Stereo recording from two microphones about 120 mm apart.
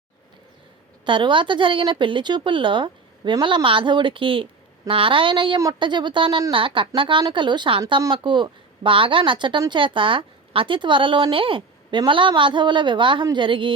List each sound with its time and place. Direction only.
1.0 s speech: 40° right (ahead or behind)